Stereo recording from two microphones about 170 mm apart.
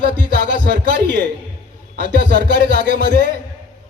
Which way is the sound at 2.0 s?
50° left (ahead or behind).